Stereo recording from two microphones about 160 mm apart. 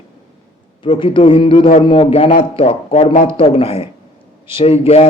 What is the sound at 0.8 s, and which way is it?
A man's voice, 35° left (ahead or behind).